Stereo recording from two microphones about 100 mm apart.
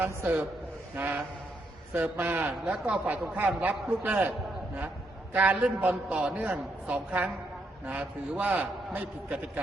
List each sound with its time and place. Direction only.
0.0 s a man's voice: 20° right (ahead or behind)